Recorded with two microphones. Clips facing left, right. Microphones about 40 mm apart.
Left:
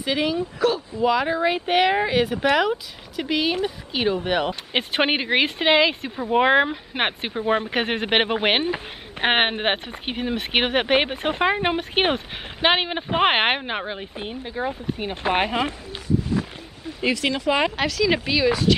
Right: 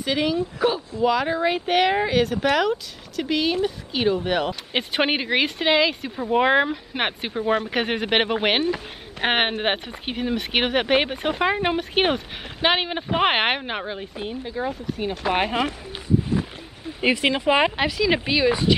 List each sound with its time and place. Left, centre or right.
0.0 s speech: centre
0.6 s speech: centre
1.0 s speech: centre
17.0 s speech: right